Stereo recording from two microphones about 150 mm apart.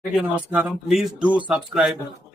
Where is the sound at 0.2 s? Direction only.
5° right (ahead or behind).